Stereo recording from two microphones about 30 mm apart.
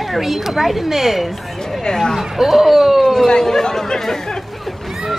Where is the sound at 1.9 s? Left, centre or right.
Centre.